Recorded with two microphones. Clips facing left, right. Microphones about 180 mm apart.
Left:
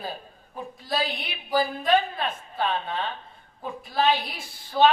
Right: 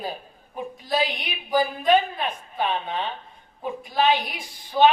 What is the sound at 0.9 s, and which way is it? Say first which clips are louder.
A man's voice: right 3 dB; 20° right (ahead or behind).